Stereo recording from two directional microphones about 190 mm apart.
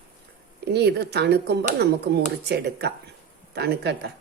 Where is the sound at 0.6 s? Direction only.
60° right (ahead or behind).